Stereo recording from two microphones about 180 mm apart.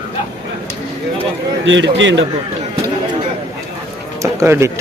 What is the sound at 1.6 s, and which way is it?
Speech, 90° right.